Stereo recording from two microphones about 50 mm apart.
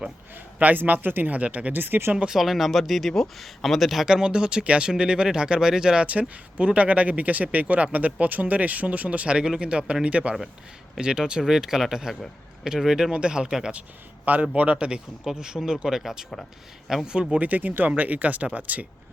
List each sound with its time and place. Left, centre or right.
0.3 s speech: right
1.3 s speech: right
1.7 s speech: right
2.1 s speech: centre
2.4 s speech: centre
4.0 s speech: centre
6.1 s speech: right
10.9 s speech: centre
14.5 s speech: right; by 17.2 s centre
17.3 s speech: right